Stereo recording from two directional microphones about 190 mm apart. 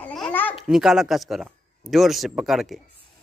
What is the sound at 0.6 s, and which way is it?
Speech, 5° right (ahead or behind).